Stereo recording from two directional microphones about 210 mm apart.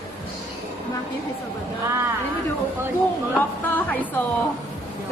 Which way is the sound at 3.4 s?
10° left (ahead or behind).